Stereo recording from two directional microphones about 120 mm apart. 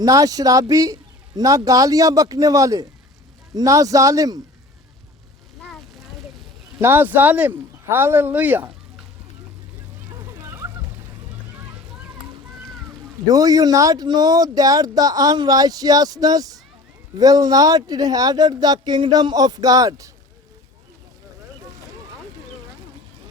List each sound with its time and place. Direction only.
0.0 s a man's voice: 30° right (ahead or behind)
6.7 s speech: 20° right (ahead or behind)
13.2 s speech: 30° right (ahead or behind)